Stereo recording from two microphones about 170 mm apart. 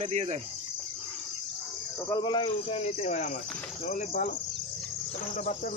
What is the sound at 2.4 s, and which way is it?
Speech, 40° left (ahead or behind).